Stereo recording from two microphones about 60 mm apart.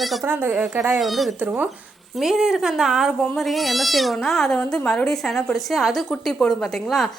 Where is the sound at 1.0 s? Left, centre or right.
Centre.